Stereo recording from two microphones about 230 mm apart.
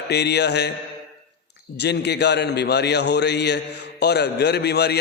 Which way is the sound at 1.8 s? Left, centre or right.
Left.